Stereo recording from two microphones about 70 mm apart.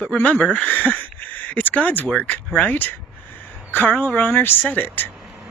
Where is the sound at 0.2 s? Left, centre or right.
Left.